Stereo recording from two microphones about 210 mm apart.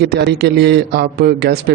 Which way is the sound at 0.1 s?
50° right (ahead or behind).